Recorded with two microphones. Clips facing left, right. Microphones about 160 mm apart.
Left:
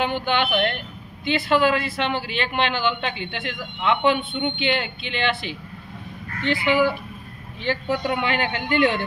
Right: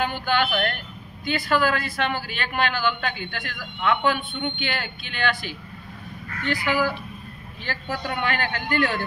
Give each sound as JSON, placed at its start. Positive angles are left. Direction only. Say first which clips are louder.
{"t": 0.0, "sound": "speech", "louder": "left 1 dB", "side_deg": 20}
{"t": 6.4, "sound": "speech", "louder": "left 4 dB", "side_deg": 25}